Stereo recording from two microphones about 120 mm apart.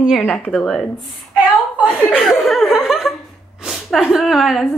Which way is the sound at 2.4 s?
Centre (ahead or behind).